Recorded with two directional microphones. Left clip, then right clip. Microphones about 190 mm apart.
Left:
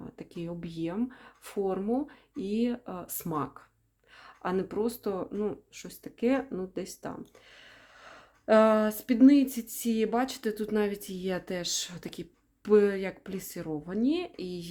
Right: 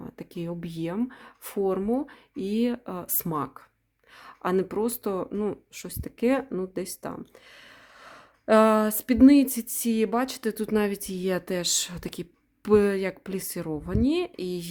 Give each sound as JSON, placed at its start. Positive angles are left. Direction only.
{"t": 0.0, "sound": "speech", "side_deg": -30}